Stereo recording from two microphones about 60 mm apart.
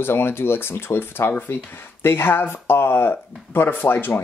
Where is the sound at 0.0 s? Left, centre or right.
Left.